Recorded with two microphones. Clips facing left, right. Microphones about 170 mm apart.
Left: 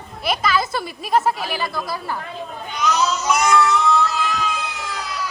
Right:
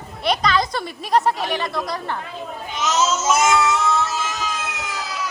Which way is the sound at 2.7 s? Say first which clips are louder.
Even; 20° right (ahead or behind).